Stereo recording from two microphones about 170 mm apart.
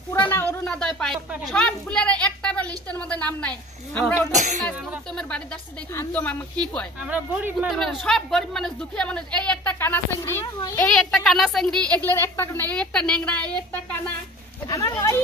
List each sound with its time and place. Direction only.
0.4 s a child's voice: 15° left (ahead or behind)
4.3 s speech: 45° right (ahead or behind)
5.9 s a woman's voice: 10° left (ahead or behind)
7.0 s a child's voice: 10° right (ahead or behind); by 10.9 s 20° left (ahead or behind)
10.9 s a woman's voice: 5° left (ahead or behind)
14.7 s a woman's voice: 20° left (ahead or behind)